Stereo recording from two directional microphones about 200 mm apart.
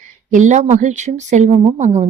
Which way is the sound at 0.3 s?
40° right (ahead or behind).